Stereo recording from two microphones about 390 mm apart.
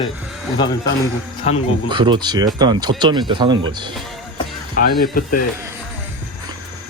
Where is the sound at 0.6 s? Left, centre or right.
Centre.